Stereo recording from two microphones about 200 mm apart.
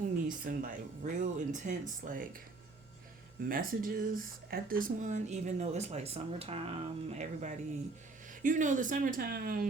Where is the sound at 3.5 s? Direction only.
45° right (ahead or behind).